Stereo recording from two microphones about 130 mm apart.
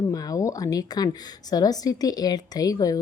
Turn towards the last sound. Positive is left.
turn(degrees=30)  # may be behind; listen again after turning